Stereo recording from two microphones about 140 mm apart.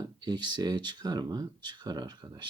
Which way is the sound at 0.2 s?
30° right (ahead or behind).